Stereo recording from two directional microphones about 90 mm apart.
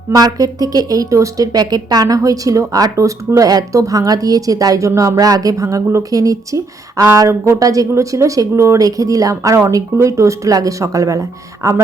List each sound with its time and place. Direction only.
0.1 s speech: 45° right (ahead or behind)